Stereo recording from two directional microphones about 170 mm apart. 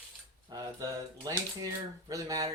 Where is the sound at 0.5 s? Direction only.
20° right (ahead or behind).